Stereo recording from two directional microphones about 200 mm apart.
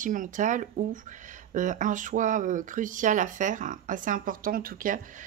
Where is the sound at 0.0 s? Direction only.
40° right (ahead or behind).